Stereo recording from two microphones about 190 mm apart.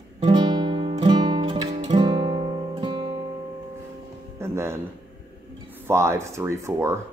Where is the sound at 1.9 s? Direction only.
25° right (ahead or behind).